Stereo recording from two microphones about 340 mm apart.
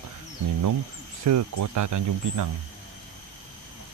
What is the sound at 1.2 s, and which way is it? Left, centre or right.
Speech, right.